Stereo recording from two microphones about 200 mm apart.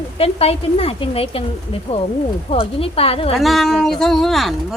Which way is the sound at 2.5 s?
30° left (ahead or behind).